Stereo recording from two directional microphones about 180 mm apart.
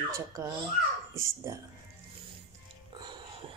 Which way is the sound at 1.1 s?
15° right (ahead or behind).